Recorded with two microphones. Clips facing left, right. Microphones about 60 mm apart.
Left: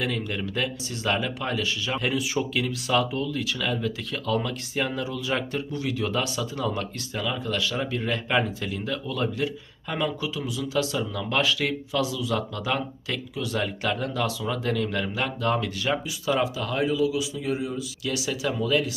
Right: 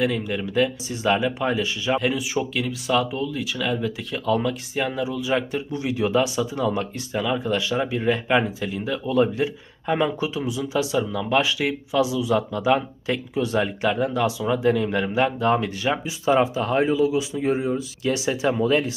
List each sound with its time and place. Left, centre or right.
0.0 s speech: centre
2.0 s speech: centre
9.0 s speech: right
10.9 s speech: centre
13.3 s speech: right
13.6 s speech: centre; by 18.9 s right